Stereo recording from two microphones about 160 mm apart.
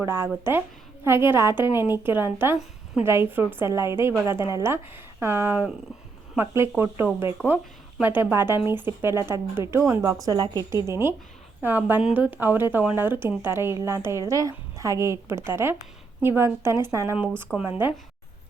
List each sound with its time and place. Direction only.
0.0 s a woman's voice: 15° right (ahead or behind)